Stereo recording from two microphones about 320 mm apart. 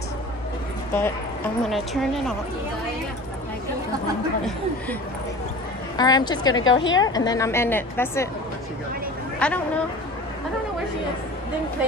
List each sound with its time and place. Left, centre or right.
0.9 s a woman's voice: centre
5.9 s a woman's voice: centre
6.6 s a woman's voice: left
7.0 s a woman's voice: centre
9.4 s a woman's voice: centre